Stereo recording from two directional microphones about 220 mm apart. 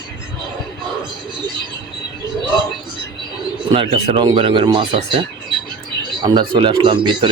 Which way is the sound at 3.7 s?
25° right (ahead or behind).